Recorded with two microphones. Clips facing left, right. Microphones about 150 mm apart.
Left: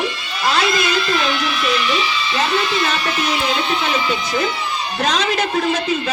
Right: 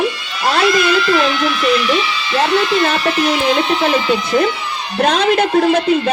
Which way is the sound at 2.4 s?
55° right (ahead or behind).